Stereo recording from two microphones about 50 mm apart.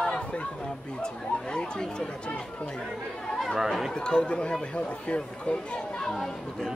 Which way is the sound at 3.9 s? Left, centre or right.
Centre.